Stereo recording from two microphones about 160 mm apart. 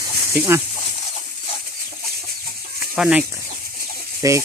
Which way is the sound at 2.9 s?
5° right (ahead or behind).